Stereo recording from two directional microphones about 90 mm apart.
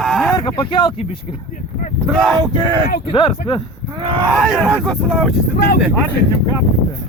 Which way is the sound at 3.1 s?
55° left (ahead or behind).